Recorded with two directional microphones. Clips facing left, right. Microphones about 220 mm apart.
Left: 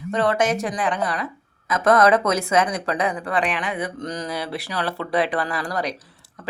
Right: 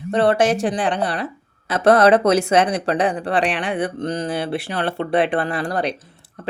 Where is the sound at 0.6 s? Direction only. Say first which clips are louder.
Right 4 dB; 30° right (ahead or behind).